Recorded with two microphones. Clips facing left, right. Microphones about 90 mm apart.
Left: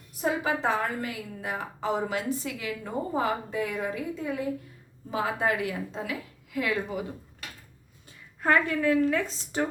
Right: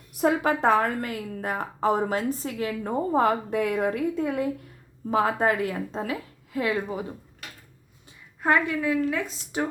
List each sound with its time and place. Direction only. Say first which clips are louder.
0.2 s a woman's voice: right 5 dB; 60° right (ahead or behind)
5.1 s a woman's voice: right 5 dB; 45° right (ahead or behind); by 7.0 s 25° right (ahead or behind)
8.4 s a woman's voice: right 1 dB; 15° right (ahead or behind)